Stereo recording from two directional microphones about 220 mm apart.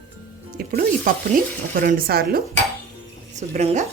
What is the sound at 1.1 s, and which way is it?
Speech, 40° right (ahead or behind).